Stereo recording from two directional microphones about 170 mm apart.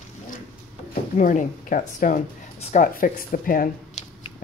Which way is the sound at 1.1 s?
50° left (ahead or behind).